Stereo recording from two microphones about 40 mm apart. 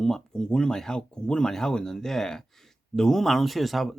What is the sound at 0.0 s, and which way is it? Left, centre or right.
Speech, centre.